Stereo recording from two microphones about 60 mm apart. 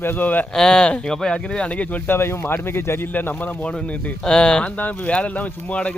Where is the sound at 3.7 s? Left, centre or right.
Centre.